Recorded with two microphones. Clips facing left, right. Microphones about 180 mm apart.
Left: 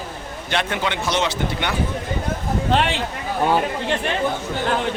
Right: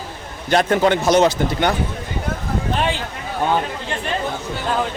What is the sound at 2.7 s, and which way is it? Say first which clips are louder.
Speech: left 2 dB; 70° left (ahead or behind).